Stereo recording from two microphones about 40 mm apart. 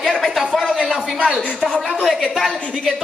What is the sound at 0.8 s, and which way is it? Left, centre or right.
Music, right.